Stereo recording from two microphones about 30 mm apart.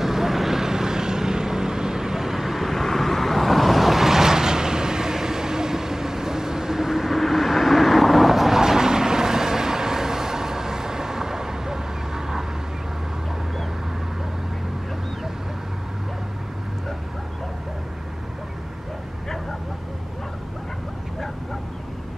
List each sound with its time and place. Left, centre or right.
0.0 s vehicle: centre
2.7 s vehicle: centre
8.5 s vehicle: centre